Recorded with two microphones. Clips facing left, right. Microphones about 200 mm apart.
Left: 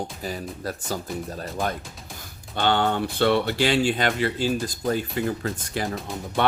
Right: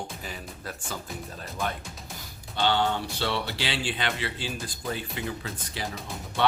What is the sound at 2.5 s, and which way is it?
Speech, 55° left (ahead or behind).